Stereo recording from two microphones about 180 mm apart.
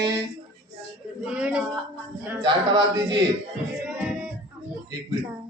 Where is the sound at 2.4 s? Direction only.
25° right (ahead or behind).